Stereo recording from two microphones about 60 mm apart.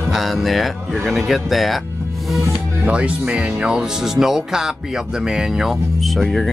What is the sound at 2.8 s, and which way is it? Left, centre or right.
Speech, right.